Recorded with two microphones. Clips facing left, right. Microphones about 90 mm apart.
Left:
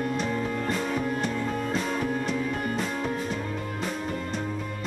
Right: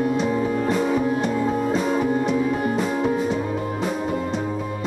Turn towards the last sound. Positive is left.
turn(degrees=-5)  # may be behind; listen again after turning